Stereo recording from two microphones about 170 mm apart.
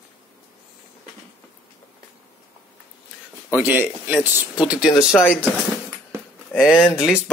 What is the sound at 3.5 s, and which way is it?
Speech, 15° right (ahead or behind).